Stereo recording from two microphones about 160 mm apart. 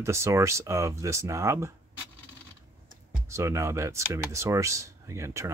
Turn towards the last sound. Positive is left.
turn(degrees=-20)  # may be behind; listen again after turning